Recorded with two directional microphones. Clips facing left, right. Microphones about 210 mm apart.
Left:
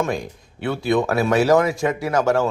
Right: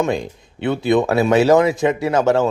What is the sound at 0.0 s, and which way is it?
Speech, 20° right (ahead or behind).